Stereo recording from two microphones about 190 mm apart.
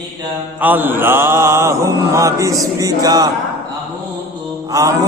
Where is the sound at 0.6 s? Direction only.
10° right (ahead or behind).